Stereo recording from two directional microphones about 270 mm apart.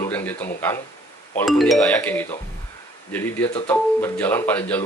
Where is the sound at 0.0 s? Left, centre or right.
Centre.